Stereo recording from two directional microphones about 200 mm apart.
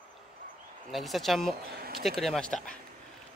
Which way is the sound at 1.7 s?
50° right (ahead or behind).